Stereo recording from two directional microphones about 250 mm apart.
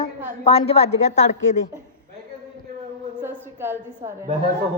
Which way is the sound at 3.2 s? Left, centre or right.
Centre.